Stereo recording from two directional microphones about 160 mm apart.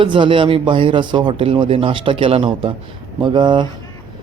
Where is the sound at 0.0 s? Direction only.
30° right (ahead or behind).